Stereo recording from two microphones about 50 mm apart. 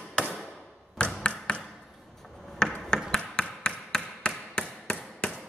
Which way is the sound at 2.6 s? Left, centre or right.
Centre.